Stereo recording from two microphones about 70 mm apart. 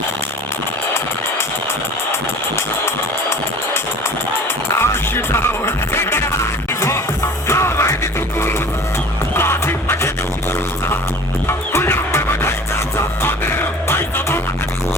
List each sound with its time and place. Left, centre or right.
4.8 s music: left
7.4 s music: left
9.3 s music: left
11.4 s music: left